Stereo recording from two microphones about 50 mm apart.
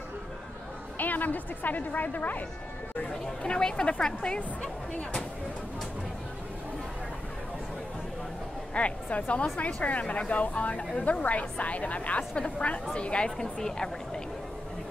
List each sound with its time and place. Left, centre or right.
0.9 s a woman's voice: left
3.1 s a woman's voice: centre
8.7 s a woman's voice: left